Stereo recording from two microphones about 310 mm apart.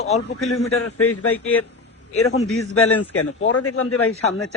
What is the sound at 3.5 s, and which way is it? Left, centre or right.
Speech, left.